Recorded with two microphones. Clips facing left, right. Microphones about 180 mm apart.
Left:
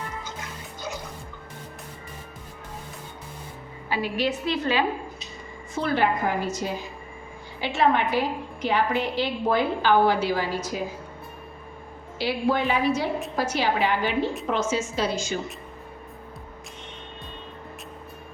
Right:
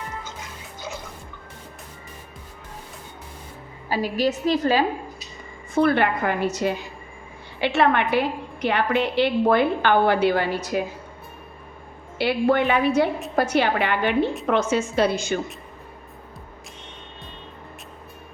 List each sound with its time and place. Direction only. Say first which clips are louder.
3.8 s a woman's voice: right 3 dB; 40° right (ahead or behind)
5.7 s a woman's voice: right 4 dB; 60° right (ahead or behind)
12.2 s a woman's voice: right 4 dB; 60° right (ahead or behind)